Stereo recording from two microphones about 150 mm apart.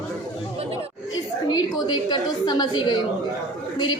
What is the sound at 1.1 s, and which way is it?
A woman's voice, 25° left (ahead or behind).